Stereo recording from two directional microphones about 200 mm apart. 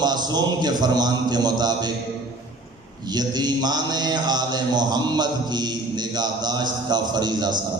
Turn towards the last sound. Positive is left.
turn(degrees=-20)  # may be behind; listen again after turning